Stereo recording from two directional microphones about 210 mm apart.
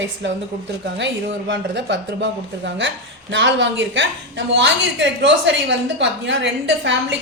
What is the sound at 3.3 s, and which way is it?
A man's voice, 60° right (ahead or behind).